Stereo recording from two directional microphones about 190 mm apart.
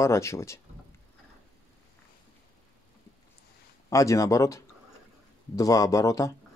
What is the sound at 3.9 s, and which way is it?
Speech, 15° left (ahead or behind).